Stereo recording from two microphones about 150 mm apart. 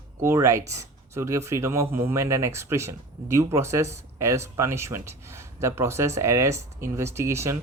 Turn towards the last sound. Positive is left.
turn(degrees=-15)  # may be behind; listen again after turning